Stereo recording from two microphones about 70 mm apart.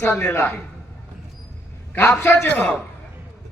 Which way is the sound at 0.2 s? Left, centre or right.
Left.